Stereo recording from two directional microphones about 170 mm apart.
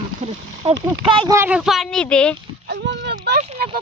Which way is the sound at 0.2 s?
40° right (ahead or behind).